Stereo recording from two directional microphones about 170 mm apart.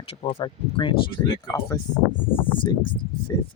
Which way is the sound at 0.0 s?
35° left (ahead or behind).